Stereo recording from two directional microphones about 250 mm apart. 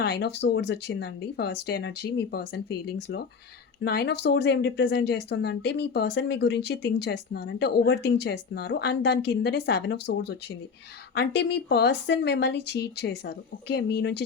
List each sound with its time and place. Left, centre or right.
0.0 s speech: left